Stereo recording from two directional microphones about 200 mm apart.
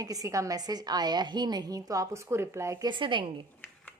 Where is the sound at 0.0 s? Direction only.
15° right (ahead or behind).